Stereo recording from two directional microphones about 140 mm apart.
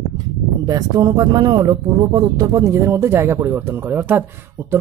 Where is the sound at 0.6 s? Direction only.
30° right (ahead or behind).